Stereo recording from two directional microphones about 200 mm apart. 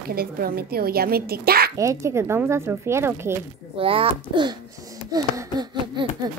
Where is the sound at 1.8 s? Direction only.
15° right (ahead or behind).